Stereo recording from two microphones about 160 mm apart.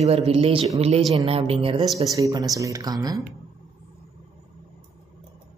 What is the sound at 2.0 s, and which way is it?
Speech, 20° right (ahead or behind).